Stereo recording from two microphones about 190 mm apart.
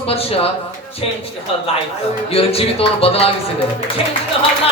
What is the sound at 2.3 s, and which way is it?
A man's voice, 30° left (ahead or behind).